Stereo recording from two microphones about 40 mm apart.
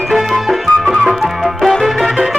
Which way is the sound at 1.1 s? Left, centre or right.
Centre.